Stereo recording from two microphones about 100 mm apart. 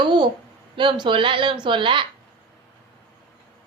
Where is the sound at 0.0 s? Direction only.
50° right (ahead or behind).